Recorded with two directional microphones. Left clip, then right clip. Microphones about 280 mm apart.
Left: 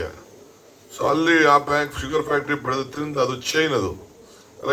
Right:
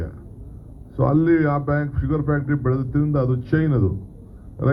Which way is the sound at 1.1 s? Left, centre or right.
Left.